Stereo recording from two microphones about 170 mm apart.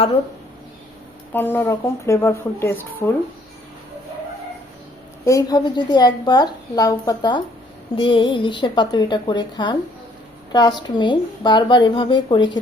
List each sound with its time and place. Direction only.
1.3 s speech: 10° left (ahead or behind)
5.2 s a woman's voice: 20° left (ahead or behind)